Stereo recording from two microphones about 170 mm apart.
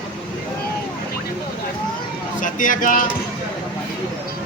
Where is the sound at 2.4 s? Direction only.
50° left (ahead or behind).